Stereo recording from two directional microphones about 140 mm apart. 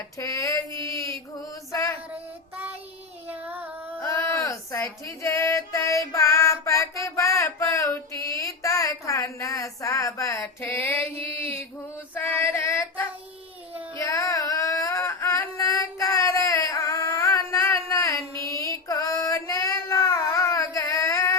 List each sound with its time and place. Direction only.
0.2 s female singing: 25° left (ahead or behind)
0.8 s a sound: 20° left (ahead or behind)
3.2 s child singing: 15° right (ahead or behind)
4.0 s female singing: 20° left (ahead or behind)
11.1 s mantra: 45° right (ahead or behind)
12.1 s child singing: 15° left (ahead or behind)
14.0 s a sound: 20° left (ahead or behind)
18.3 s child singing: 20° left (ahead or behind)